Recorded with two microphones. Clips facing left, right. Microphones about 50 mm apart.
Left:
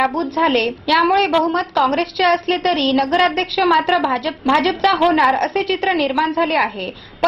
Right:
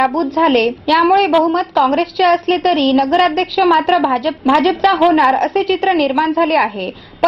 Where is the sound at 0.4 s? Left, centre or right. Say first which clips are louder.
Right 3 dB; centre.